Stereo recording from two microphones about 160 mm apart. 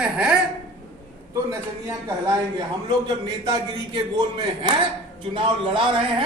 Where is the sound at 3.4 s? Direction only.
25° right (ahead or behind).